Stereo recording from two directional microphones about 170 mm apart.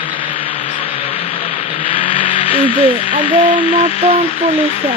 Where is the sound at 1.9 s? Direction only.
30° left (ahead or behind).